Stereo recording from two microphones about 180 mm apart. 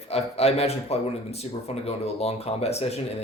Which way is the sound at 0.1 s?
35° left (ahead or behind).